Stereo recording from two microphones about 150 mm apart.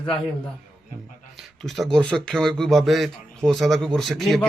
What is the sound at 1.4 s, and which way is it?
Speech, centre (ahead or behind).